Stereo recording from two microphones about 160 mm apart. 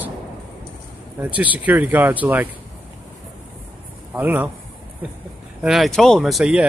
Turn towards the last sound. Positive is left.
turn(degrees=-5)  # may be behind; listen again after turning